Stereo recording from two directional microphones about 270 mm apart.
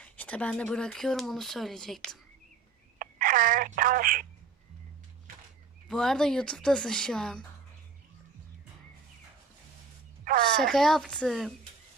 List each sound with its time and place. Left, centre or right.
0.0 s speech: centre
3.0 s speech: right
5.9 s speech: centre
10.2 s speech: right
10.6 s speech: centre